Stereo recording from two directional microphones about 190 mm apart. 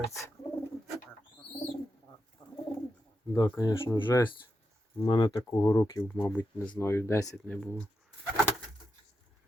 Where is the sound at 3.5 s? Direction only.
15° left (ahead or behind).